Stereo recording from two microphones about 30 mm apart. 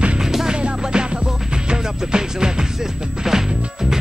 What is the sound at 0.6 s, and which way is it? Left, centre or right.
Music, right.